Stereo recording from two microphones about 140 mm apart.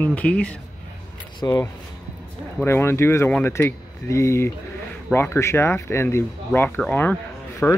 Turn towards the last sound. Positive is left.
turn(degrees=15)  # may be behind; listen again after turning